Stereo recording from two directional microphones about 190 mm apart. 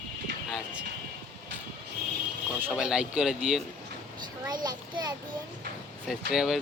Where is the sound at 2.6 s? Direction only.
5° right (ahead or behind).